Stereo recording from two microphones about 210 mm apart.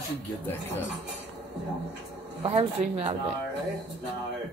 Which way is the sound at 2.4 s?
25° right (ahead or behind).